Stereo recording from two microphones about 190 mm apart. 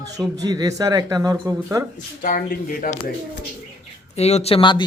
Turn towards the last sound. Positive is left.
turn(degrees=25)  # may be behind; listen again after turning